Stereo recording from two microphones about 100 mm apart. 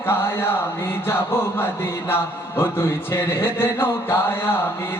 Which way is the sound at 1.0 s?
20° left (ahead or behind).